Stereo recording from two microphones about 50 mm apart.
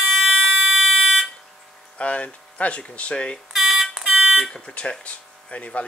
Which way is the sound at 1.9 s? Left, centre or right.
Left.